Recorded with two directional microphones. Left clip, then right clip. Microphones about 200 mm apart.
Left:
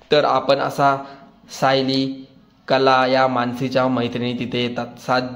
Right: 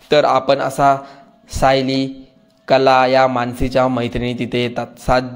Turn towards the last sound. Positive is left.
turn(degrees=-25)  # may be behind; listen again after turning